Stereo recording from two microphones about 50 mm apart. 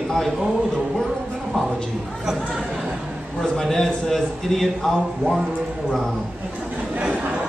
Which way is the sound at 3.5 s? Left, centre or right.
Centre.